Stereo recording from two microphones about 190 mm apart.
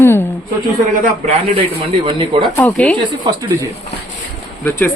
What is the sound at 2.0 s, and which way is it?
Speech, 25° right (ahead or behind).